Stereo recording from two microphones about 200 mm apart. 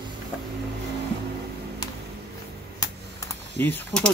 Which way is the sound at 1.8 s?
20° left (ahead or behind).